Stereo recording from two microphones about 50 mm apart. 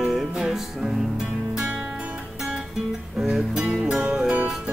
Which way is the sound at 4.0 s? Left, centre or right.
Right.